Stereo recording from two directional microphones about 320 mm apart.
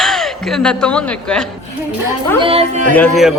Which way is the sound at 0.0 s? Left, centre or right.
Centre.